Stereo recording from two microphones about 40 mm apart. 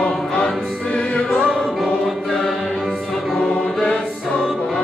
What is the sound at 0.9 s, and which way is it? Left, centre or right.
Music, left.